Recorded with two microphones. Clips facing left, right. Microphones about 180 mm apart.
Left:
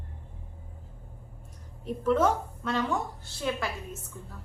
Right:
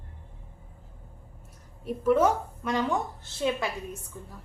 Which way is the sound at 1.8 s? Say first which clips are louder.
Right 2 dB; 10° right (ahead or behind).